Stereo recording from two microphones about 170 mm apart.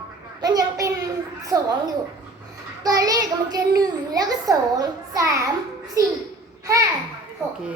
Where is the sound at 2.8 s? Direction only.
20° right (ahead or behind).